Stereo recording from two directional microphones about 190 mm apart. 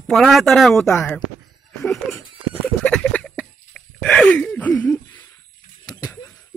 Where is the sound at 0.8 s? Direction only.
10° left (ahead or behind).